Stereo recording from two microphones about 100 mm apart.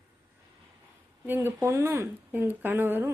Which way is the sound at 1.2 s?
20° right (ahead or behind).